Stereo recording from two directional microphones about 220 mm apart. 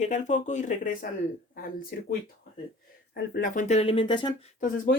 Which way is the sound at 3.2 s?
45° left (ahead or behind).